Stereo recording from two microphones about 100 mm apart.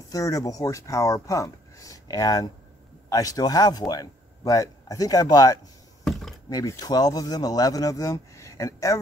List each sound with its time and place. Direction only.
0.1 s a man's voice: 35° left (ahead or behind)